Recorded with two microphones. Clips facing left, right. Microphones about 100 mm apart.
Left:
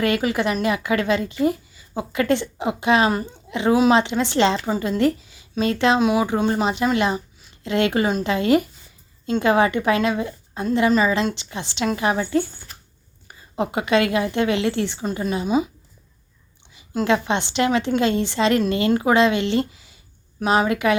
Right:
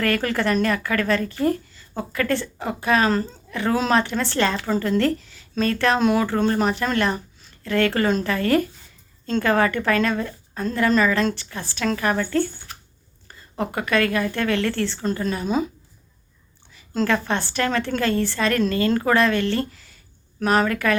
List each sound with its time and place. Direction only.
0.0 s speech: 15° left (ahead or behind)
6.0 s speech: 5° left (ahead or behind)
16.7 s speech: 15° left (ahead or behind)